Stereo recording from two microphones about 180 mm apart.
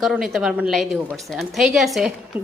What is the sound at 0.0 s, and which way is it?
A woman's voice, centre (ahead or behind).